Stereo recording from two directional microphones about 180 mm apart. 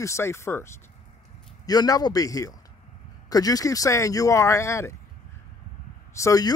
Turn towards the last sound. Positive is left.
turn(degrees=20)  # may be behind; listen again after turning